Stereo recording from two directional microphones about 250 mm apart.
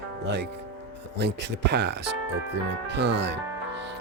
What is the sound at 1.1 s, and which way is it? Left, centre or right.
Speech, right.